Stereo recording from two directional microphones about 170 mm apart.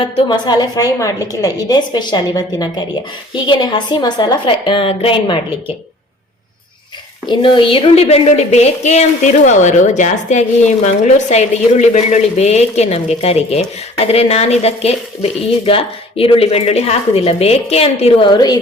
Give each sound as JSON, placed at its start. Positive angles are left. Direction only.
{"t": 0.0, "sound": "a woman's voice", "side_deg": 25}
{"t": 7.3, "sound": "a woman's voice", "side_deg": 30}